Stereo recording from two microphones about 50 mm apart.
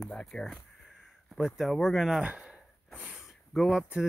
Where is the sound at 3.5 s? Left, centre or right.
Centre.